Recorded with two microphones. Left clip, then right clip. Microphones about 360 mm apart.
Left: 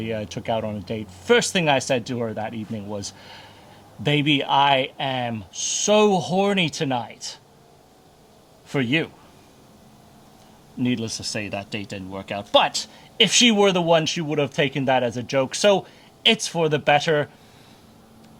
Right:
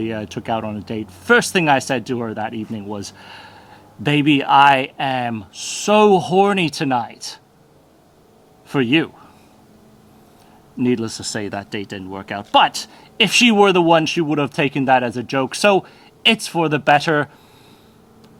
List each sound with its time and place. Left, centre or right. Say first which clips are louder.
0.0 s speech: right 3 dB; centre
8.7 s speech: right 6 dB; centre
10.8 s speech: right 5 dB; centre